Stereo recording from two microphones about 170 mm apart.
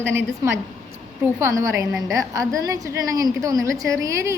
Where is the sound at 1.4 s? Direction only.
15° right (ahead or behind).